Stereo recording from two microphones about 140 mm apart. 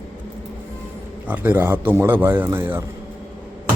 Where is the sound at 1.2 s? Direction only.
15° right (ahead or behind).